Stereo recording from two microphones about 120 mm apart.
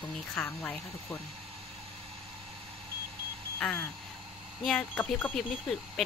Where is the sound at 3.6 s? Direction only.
15° left (ahead or behind).